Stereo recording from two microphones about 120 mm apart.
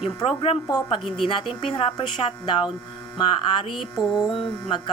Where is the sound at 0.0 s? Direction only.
55° left (ahead or behind).